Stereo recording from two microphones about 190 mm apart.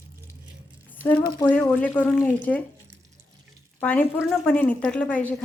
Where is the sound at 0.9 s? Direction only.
10° left (ahead or behind).